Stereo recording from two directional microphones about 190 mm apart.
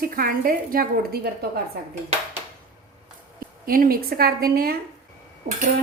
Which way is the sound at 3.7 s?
50° right (ahead or behind).